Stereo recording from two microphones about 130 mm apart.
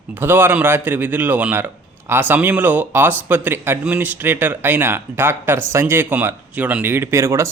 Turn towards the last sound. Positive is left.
turn(degrees=-20)  # may be behind; listen again after turning